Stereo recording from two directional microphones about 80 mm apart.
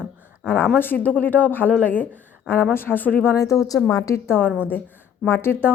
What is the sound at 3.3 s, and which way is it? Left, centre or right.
A woman's voice, left.